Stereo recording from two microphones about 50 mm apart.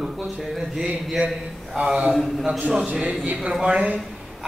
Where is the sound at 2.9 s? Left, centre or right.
Right.